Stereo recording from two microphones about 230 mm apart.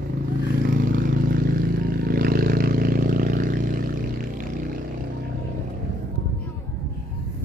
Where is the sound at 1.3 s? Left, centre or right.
Right.